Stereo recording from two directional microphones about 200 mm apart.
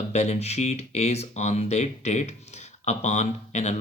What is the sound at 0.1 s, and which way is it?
Speech, 35° left (ahead or behind).